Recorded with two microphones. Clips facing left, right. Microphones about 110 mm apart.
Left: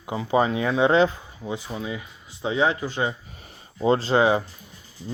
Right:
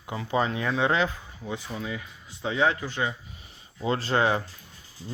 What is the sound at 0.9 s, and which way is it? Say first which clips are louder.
Speech: left 8 dB; 25° left (ahead or behind).